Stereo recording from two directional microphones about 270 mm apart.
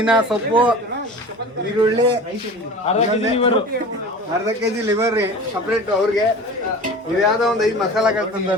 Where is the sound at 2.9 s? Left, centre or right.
Left.